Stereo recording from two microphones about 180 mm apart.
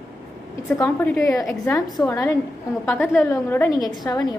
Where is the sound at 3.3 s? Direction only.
15° left (ahead or behind).